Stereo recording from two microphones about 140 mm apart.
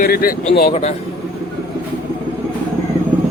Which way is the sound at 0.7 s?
50° left (ahead or behind).